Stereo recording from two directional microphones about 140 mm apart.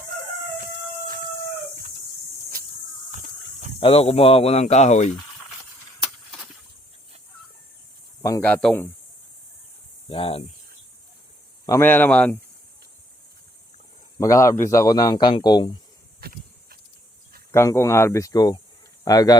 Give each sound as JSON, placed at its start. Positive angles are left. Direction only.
{"t": 0.6, "sound": "a sound", "side_deg": -90}
{"t": 3.1, "sound": "a sound", "side_deg": -60}
{"t": 3.8, "sound": "speech", "side_deg": 45}
{"t": 8.2, "sound": "speech", "side_deg": 20}
{"t": 10.1, "sound": "speech", "side_deg": 40}
{"t": 11.8, "sound": "speech", "side_deg": 15}
{"t": 14.2, "sound": "speech", "side_deg": 20}
{"t": 16.2, "sound": "a sound", "side_deg": -90}
{"t": 17.5, "sound": "speech", "side_deg": 20}